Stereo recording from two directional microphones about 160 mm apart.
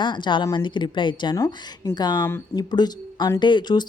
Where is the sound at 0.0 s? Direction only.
30° left (ahead or behind).